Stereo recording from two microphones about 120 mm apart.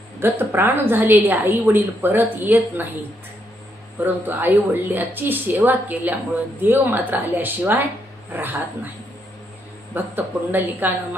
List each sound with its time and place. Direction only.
0.2 s a woman's voice: 20° right (ahead or behind)
4.0 s a woman's voice: 15° right (ahead or behind)
9.9 s a woman's voice: 15° right (ahead or behind)